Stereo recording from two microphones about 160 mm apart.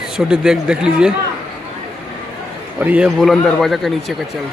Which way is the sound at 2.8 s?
10° right (ahead or behind).